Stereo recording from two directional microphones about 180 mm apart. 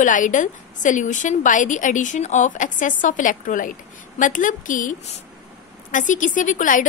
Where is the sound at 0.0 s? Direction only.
45° left (ahead or behind).